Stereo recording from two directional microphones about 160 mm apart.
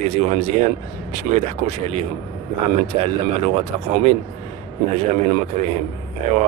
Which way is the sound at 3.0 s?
40° right (ahead or behind).